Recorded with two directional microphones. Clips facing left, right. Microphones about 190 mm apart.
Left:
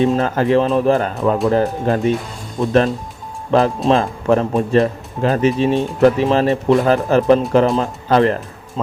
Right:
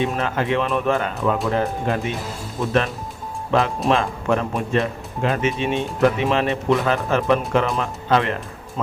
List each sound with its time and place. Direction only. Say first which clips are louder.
0.0 s speech: left 7 dB; 35° left (ahead or behind)
3.8 s speech: left 5 dB; 35° left (ahead or behind)